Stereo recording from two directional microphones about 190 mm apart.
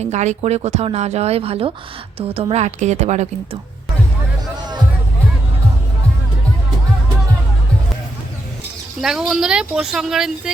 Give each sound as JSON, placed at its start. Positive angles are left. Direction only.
{"t": 0.0, "sound": "speech", "side_deg": -35}
{"t": 9.0, "sound": "speech", "side_deg": -5}